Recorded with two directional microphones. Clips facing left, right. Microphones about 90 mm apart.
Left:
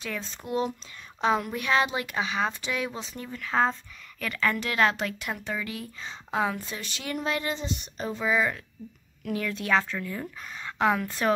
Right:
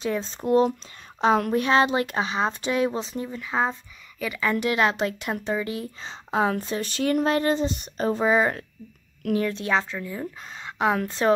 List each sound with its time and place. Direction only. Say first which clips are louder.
0.0 s speech: right 9 dB; 30° right (ahead or behind)
3.1 s a woman's voice: right 3 dB; 20° right (ahead or behind); by 8.6 s 40° right (ahead or behind)
9.3 s a woman's voice: right 3 dB; 30° right (ahead or behind); by 10.2 s 15° right (ahead or behind)
10.4 s a woman's voice: even; 25° right (ahead or behind)